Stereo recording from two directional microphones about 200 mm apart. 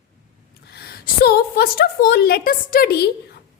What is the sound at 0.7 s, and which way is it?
A woman's voice, 50° left (ahead or behind).